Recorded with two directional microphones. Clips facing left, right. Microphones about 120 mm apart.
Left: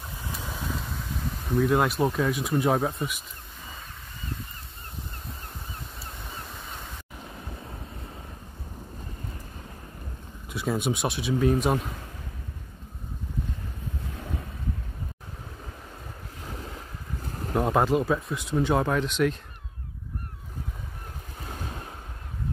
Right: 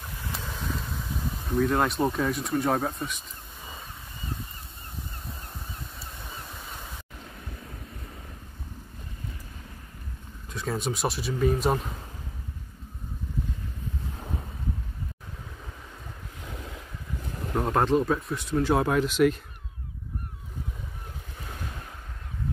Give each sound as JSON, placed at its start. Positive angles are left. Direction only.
{"t": 0.2, "sound": "vehicle", "side_deg": 15}
{"t": 0.6, "sound": "a sound", "side_deg": 0}
{"t": 2.5, "sound": "speech", "side_deg": 5}
{"t": 10.5, "sound": "speech", "side_deg": 5}
{"t": 17.6, "sound": "speech", "side_deg": 5}